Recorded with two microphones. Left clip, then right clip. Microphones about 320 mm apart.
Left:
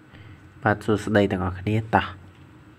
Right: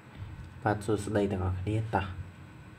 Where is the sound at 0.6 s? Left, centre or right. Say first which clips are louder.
Left 7 dB; left.